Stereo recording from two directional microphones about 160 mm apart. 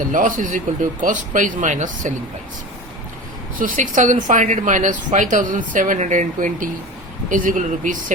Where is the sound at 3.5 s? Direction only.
55° right (ahead or behind).